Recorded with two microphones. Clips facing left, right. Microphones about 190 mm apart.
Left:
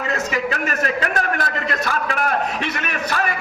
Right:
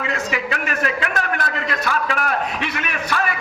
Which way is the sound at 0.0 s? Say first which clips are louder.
Left 2 dB; 40° left (ahead or behind).